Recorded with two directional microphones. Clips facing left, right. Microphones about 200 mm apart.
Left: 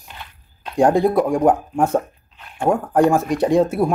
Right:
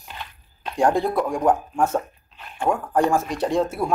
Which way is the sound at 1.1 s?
35° left (ahead or behind).